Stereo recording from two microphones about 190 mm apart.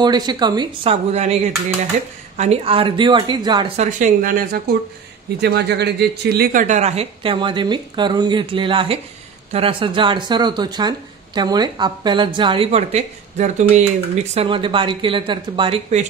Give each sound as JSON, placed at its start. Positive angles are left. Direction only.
{"t": 0.0, "sound": "speech", "side_deg": -20}
{"t": 3.7, "sound": "speech", "side_deg": -40}
{"t": 5.4, "sound": "speech", "side_deg": -60}